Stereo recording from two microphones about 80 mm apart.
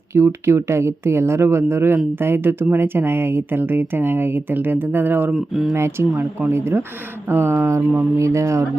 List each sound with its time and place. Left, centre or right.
0.1 s speech: right
5.3 s speech: centre
5.7 s speech: right